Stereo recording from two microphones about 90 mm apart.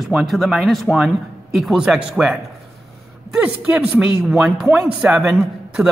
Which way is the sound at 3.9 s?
5° right (ahead or behind).